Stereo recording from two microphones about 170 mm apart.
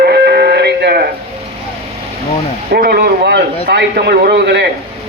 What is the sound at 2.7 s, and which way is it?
A man's voice, 65° right (ahead or behind).